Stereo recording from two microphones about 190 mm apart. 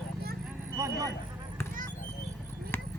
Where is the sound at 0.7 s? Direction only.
15° right (ahead or behind).